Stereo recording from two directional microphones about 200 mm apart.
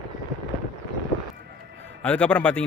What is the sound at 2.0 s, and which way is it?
Speech, 5° left (ahead or behind).